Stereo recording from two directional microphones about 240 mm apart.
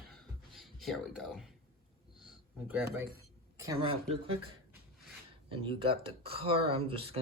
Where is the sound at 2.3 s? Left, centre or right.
Centre.